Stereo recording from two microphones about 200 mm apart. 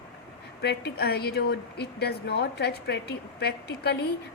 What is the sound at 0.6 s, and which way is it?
A woman's voice, 55° left (ahead or behind).